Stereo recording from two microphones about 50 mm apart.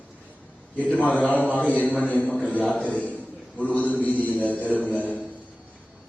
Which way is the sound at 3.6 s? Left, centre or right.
Left.